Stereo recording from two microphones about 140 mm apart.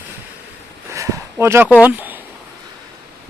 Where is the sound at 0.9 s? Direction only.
20° right (ahead or behind).